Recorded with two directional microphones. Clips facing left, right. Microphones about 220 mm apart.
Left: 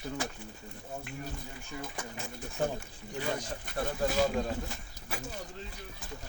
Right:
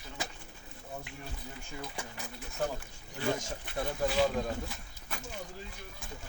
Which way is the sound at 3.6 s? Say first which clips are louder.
Left 1 dB; 45° left (ahead or behind).